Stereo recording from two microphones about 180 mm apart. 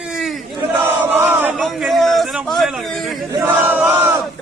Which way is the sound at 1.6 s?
Centre (ahead or behind).